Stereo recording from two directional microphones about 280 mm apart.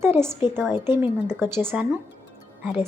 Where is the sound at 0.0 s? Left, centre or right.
Centre.